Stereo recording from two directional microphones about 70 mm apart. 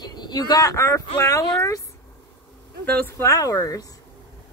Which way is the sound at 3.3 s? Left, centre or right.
Left.